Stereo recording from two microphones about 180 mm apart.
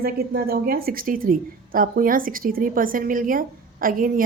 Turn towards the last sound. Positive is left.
turn(degrees=-50)  # may be behind; listen again after turning